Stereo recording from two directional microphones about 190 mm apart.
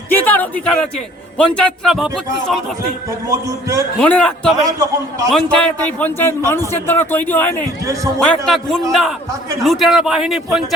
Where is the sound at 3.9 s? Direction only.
5° left (ahead or behind).